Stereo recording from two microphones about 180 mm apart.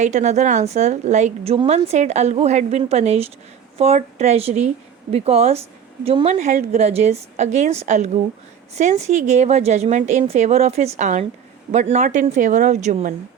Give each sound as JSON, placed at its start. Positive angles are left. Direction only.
{"t": 0.0, "sound": "a woman's voice", "side_deg": -40}